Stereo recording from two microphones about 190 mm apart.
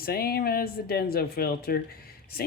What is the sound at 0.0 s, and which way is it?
Speech, 50° left (ahead or behind).